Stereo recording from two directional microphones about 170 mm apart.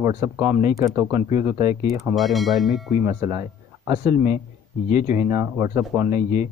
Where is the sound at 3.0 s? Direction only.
20° right (ahead or behind).